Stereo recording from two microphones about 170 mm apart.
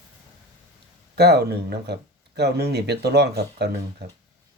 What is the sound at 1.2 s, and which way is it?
Speech, 75° right (ahead or behind).